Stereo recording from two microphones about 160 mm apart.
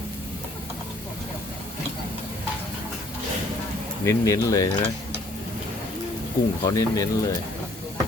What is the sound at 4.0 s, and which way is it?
Speech, 20° left (ahead or behind).